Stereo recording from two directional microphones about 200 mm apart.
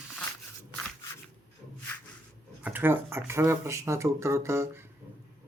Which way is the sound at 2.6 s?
10° right (ahead or behind).